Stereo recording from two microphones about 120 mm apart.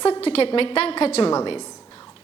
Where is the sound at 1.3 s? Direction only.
40° left (ahead or behind).